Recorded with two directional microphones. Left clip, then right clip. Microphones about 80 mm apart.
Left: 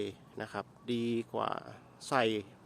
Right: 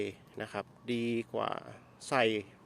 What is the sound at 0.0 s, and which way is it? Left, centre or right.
Speech, centre.